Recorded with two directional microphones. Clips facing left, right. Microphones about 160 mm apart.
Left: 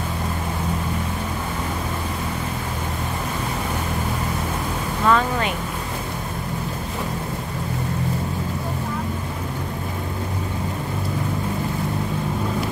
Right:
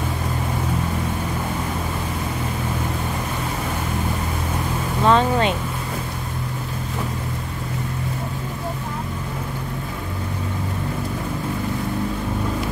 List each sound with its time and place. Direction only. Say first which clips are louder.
5.0 s vehicle: right 3 dB; 25° right (ahead or behind)